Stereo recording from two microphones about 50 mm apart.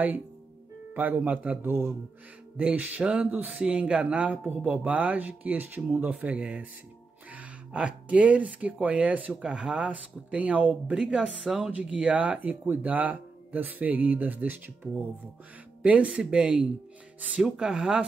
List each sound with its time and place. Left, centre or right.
0.9 s speech: right
1.6 s a man's voice: right
2.5 s speech: right
3.5 s speech: right
7.7 s speech: right
9.4 s speech: centre
11.4 s speech: centre
11.7 s speech: right
12.4 s speech: right
17.4 s speech: centre